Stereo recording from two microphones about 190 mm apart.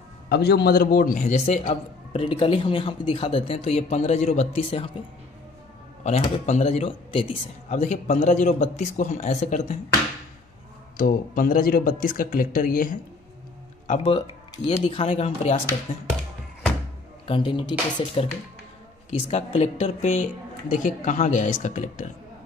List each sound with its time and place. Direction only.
0.3 s a man's voice: 60° left (ahead or behind); by 4.9 s 30° left (ahead or behind)
6.0 s a man's voice: 35° left (ahead or behind)
11.0 s a man's voice: 50° left (ahead or behind); by 15.5 s 30° left (ahead or behind)
17.3 s speech: 25° left (ahead or behind)
19.3 s a man's voice: 35° left (ahead or behind)